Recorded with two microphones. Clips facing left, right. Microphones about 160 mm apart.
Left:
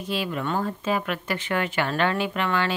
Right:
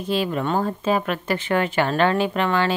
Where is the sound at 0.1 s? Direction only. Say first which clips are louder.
Right 5 dB; 40° right (ahead or behind).